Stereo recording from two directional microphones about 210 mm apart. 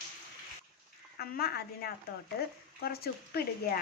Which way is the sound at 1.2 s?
45° left (ahead or behind).